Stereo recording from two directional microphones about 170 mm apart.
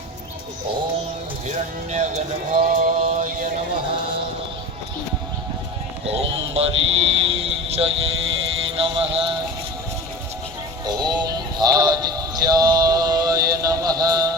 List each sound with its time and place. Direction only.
1.5 s speech: 45° right (ahead or behind)
3.0 s music: 45° right (ahead or behind)
6.1 s music: 35° right (ahead or behind)
10.8 s music: 25° right (ahead or behind)